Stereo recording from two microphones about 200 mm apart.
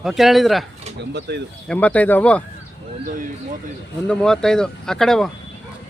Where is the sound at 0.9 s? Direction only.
60° right (ahead or behind).